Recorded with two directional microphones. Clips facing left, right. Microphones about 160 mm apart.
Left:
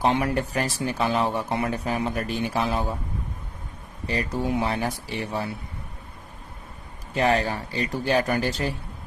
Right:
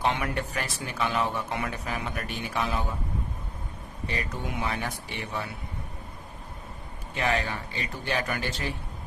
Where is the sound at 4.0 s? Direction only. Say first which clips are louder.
Left 7 dB; 35° left (ahead or behind).